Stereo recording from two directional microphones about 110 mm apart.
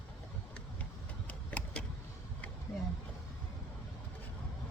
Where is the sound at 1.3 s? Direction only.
10° left (ahead or behind).